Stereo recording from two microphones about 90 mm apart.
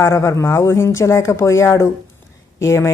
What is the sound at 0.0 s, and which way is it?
A woman's voice, 30° left (ahead or behind).